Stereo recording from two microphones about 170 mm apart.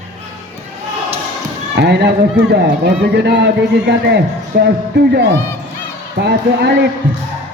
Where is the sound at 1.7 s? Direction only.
85° right.